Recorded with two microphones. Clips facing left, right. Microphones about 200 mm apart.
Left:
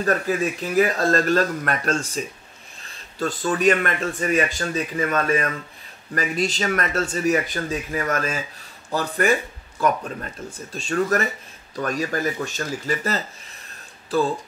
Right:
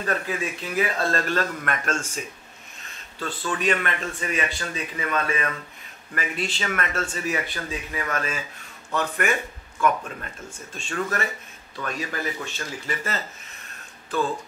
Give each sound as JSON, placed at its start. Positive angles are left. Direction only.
{"t": 0.0, "sound": "speech", "side_deg": 40}